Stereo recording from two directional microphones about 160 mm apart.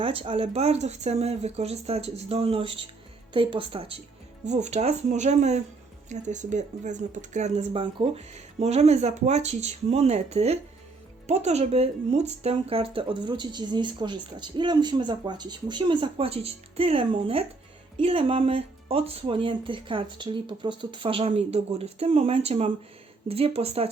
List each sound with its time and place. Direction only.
0.0 s speech: 35° right (ahead or behind)
4.4 s speech: 45° right (ahead or behind)